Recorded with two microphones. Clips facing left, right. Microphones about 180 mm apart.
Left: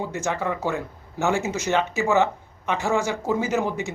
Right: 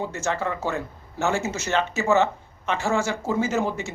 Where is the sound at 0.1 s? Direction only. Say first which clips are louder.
Left 1 dB; 15° left (ahead or behind).